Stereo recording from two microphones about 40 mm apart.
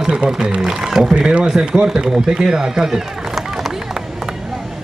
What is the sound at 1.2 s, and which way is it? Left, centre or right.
A man's voice, right.